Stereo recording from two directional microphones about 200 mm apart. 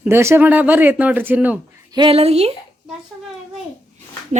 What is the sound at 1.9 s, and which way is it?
Speech, 25° right (ahead or behind).